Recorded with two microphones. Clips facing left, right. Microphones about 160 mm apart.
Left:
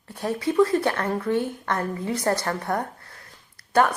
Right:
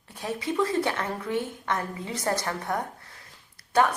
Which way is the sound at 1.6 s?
55° left (ahead or behind).